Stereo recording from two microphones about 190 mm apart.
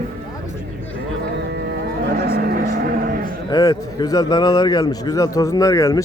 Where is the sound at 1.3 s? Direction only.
60° right (ahead or behind).